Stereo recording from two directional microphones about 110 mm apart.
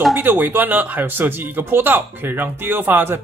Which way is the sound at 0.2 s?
15° right (ahead or behind).